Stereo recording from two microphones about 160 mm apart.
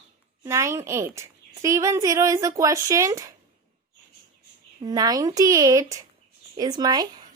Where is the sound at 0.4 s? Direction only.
15° right (ahead or behind).